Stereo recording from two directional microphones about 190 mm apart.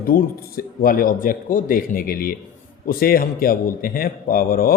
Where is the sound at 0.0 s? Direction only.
50° left (ahead or behind).